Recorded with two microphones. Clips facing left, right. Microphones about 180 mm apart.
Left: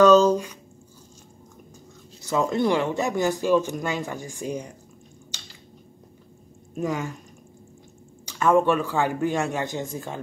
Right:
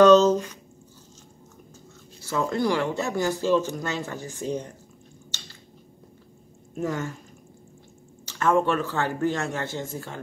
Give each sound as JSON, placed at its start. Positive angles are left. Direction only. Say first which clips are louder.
{"t": 0.1, "sound": "a sound", "louder": "even", "side_deg": 10}
{"t": 2.2, "sound": "speech", "louder": "left 2 dB", "side_deg": 20}
{"t": 6.7, "sound": "speech", "louder": "left 1 dB", "side_deg": 15}
{"t": 8.3, "sound": "speech", "louder": "left 3 dB", "side_deg": 15}